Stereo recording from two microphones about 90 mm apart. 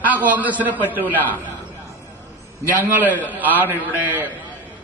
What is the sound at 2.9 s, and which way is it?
A man's voice, 20° right (ahead or behind).